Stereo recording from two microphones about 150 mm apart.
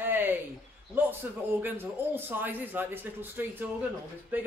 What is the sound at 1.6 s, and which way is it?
A man's voice, 15° right (ahead or behind).